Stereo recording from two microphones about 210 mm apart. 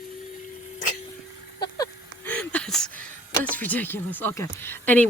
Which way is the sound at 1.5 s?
20° left (ahead or behind).